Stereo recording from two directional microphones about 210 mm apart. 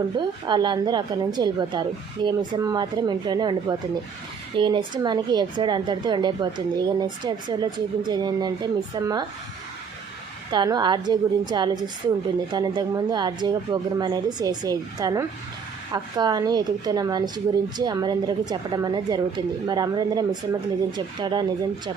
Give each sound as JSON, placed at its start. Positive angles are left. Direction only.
{"t": 0.2, "sound": "a woman's voice", "side_deg": -20}
{"t": 10.5, "sound": "a woman's voice", "side_deg": -20}